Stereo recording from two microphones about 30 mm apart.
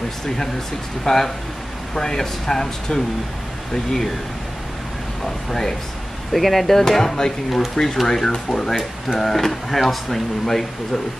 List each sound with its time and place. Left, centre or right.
1.0 s speech: centre
5.2 s speech: centre
6.3 s speech: centre
7.7 s speech: left
8.0 s speech: centre